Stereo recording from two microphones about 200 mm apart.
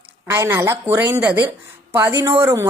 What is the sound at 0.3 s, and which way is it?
A woman's voice, 10° right (ahead or behind).